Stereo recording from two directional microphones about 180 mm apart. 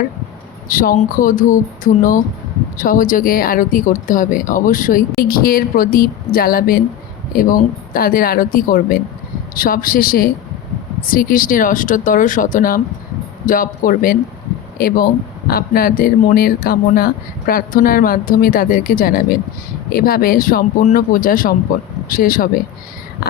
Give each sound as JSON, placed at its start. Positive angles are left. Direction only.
{"t": 0.7, "sound": "speech", "side_deg": 50}